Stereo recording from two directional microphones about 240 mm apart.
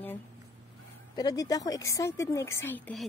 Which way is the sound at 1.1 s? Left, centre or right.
Centre.